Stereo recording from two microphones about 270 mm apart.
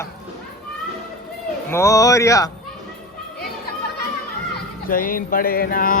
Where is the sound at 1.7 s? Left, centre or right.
Centre.